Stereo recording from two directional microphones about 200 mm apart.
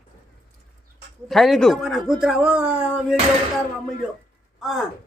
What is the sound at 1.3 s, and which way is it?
A man's voice, centre (ahead or behind).